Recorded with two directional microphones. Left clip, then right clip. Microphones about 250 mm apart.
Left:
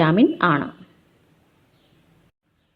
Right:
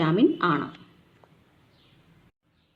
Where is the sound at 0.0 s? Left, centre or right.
Left.